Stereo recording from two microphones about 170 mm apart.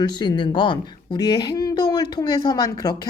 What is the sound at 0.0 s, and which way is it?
A woman's voice, 25° left (ahead or behind).